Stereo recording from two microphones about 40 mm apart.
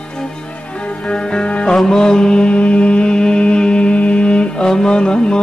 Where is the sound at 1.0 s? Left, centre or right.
Left.